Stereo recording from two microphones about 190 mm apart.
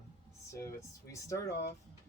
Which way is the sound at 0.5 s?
15° left (ahead or behind).